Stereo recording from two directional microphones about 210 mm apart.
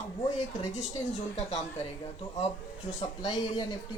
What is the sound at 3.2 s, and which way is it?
Speech, 20° left (ahead or behind).